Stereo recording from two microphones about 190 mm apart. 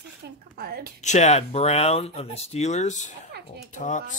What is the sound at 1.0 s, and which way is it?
Speech, 40° left (ahead or behind).